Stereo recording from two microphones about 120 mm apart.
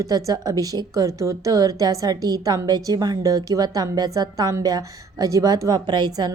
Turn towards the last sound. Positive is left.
turn(degrees=-35)  # may be behind; listen again after turning